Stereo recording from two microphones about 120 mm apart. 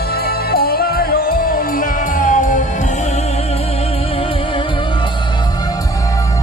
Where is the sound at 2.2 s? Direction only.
90° left.